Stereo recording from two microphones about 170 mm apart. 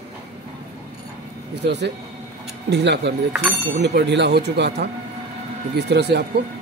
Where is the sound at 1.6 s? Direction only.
90° right.